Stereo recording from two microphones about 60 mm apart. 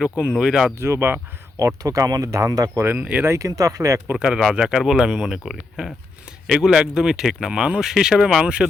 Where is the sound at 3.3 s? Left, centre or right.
Right.